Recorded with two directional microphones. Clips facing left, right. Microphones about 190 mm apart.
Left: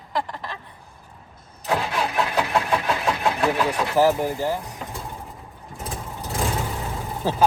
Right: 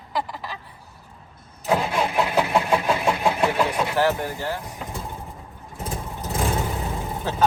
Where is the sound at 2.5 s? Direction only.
5° right (ahead or behind).